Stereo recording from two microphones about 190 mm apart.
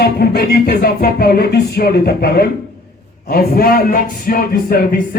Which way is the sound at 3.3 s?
50° left (ahead or behind).